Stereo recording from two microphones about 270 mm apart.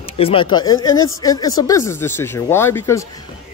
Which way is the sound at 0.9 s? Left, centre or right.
Left.